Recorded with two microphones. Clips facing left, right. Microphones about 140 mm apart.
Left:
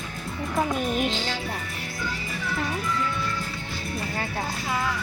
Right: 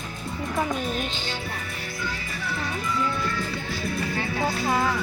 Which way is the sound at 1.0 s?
90° left.